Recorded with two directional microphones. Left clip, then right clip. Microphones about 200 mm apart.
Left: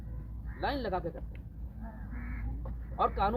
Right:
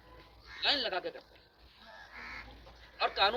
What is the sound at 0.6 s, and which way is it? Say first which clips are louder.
Speech: right 2 dB; 10° right (ahead or behind).